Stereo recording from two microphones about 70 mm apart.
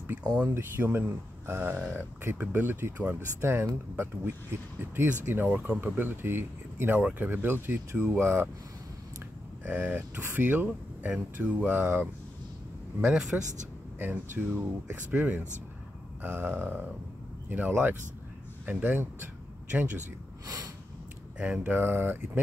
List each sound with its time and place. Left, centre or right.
0.6 s speech: right
7.0 s a man's voice: centre
7.2 s speech: right
9.7 s speech: right
13.0 s a man's voice: centre
13.9 s speech: right
21.4 s speech: right